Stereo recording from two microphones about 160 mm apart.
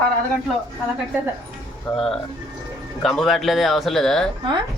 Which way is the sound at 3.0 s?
5° left (ahead or behind).